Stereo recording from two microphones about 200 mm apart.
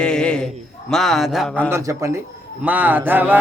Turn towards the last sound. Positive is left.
turn(degrees=-10)  # may be behind; listen again after turning